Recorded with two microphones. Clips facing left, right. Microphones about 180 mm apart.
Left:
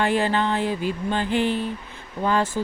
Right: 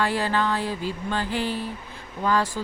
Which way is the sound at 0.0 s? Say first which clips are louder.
Left 3 dB; 20° left (ahead or behind).